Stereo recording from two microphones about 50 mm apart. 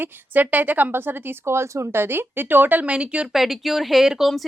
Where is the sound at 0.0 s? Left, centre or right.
Right.